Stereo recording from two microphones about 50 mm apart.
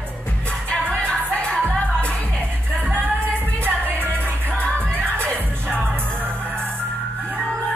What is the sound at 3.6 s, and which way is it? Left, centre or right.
Music, right.